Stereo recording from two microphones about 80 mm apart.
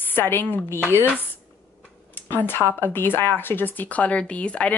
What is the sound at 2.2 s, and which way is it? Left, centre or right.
Speech, left.